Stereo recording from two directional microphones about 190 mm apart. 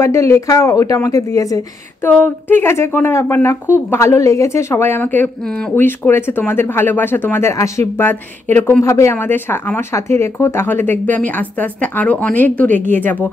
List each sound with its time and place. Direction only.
0.0 s a woman's voice: 15° left (ahead or behind)